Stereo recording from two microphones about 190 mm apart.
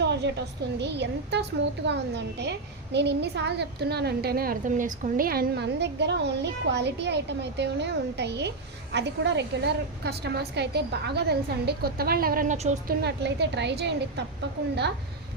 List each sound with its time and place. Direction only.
0.0 s a woman's voice: 65° right (ahead or behind); by 12.7 s 40° right (ahead or behind)
13.0 s a woman's voice: 65° right (ahead or behind)